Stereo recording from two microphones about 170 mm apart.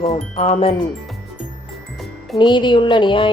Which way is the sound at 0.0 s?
40° left (ahead or behind).